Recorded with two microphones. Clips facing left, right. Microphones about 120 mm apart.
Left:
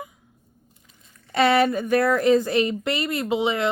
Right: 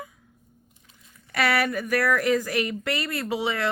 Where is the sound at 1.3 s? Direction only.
25° left (ahead or behind).